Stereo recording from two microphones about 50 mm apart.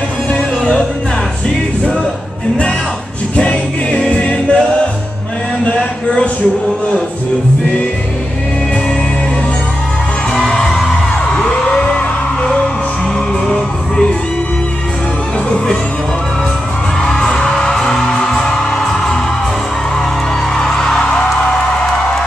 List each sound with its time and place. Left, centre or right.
0.3 s music: centre
3.3 s music: left
10.3 s music: centre
11.3 s a sound: centre
17.0 s music: centre
20.5 s music: centre